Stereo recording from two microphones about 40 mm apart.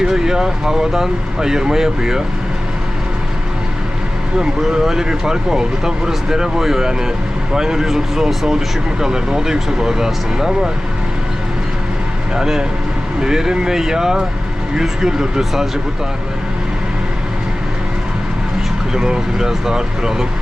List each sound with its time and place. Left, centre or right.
0.1 s speech: centre
4.4 s speech: centre
12.3 s speech: centre
18.9 s speech: centre